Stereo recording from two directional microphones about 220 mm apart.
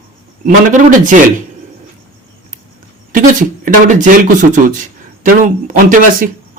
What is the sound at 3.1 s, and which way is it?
Speech, 40° right (ahead or behind).